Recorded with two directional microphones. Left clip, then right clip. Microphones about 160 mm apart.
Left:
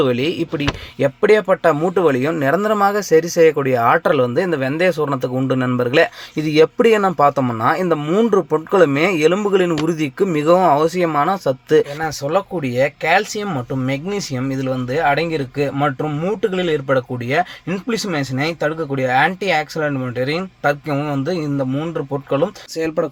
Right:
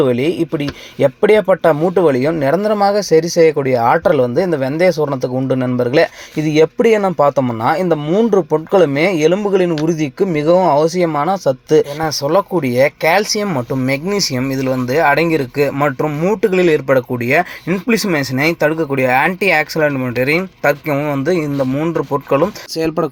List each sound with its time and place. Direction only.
0.0 s speech: 10° right (ahead or behind)
12.0 s speech: 20° right (ahead or behind)